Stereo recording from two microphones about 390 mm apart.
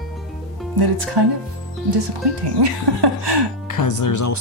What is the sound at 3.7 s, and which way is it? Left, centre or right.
Speech, left.